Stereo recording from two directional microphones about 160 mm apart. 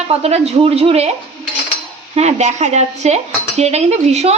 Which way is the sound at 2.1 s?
45° right (ahead or behind).